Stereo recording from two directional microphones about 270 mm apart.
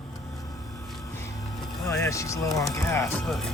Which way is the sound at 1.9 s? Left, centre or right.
Centre.